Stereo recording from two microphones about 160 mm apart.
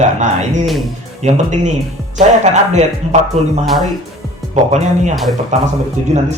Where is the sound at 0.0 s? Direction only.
50° right (ahead or behind).